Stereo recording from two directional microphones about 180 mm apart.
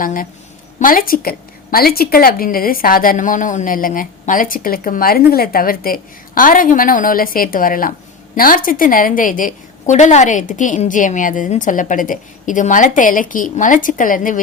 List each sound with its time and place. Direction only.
0.0 s a woman's voice: 50° left (ahead or behind)